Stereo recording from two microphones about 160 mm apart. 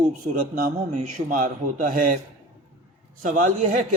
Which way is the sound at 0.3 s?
65° right (ahead or behind).